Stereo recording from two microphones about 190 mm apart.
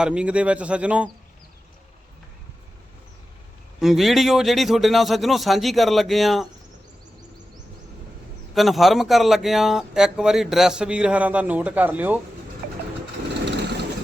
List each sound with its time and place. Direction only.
0.0 s speech: 5° right (ahead or behind)
3.8 s speech: centre (ahead or behind)
8.5 s speech: centre (ahead or behind)
13.4 s vehicle: 65° right (ahead or behind)